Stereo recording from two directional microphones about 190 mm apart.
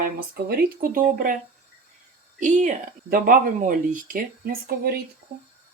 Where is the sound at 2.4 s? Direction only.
40° right (ahead or behind).